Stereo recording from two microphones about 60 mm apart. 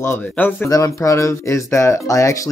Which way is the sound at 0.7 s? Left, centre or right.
Left.